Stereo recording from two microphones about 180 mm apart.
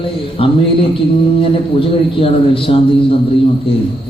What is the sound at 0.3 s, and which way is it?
A man's voice, 30° left (ahead or behind).